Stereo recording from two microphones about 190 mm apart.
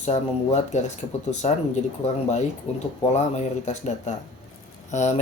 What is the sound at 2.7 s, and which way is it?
Speech, 35° left (ahead or behind).